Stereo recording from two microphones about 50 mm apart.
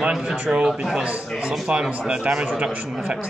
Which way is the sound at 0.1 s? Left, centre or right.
Centre.